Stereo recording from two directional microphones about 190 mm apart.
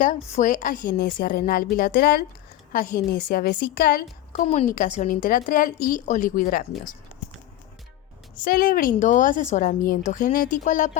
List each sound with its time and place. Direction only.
0.0 s a woman's voice: 40° left (ahead or behind)
2.7 s a woman's voice: 45° left (ahead or behind)
8.4 s a woman's voice: 50° left (ahead or behind)